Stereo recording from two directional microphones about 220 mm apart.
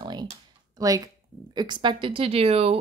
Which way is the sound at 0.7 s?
15° right (ahead or behind).